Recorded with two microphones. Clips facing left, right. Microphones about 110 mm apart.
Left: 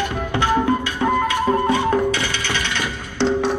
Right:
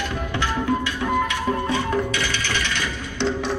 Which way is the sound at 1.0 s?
50° left (ahead or behind).